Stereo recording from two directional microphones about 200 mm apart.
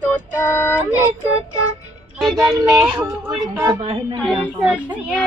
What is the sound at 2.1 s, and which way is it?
Speech, centre (ahead or behind).